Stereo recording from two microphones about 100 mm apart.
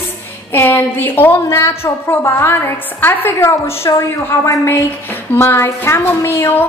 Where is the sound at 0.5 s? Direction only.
20° left (ahead or behind).